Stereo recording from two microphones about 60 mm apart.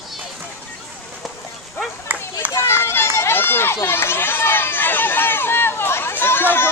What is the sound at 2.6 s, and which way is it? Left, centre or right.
Run, left.